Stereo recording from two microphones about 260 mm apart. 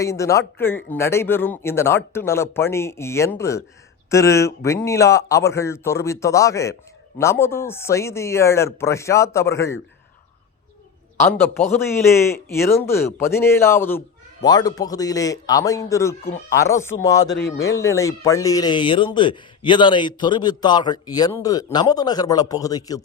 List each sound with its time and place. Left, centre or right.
0.0 s speech: centre
11.3 s speech: centre